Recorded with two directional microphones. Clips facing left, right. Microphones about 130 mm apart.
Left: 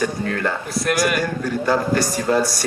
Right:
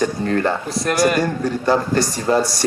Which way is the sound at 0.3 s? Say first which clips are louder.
Right 4 dB; 30° right (ahead or behind).